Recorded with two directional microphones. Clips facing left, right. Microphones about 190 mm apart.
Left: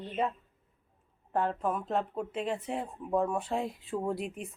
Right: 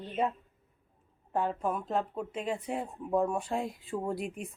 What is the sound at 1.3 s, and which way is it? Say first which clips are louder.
Speech: left 1 dB; 5° right (ahead or behind).